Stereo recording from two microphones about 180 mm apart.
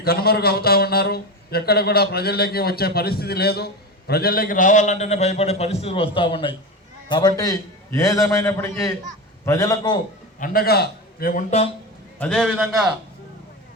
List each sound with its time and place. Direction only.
0.0 s a man's voice: 60° left (ahead or behind); by 10.0 s 20° left (ahead or behind)
10.4 s a man's voice: 55° left (ahead or behind)
12.2 s a man's voice: centre (ahead or behind)